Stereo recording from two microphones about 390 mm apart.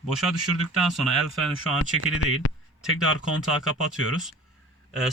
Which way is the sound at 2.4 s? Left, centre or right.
Left.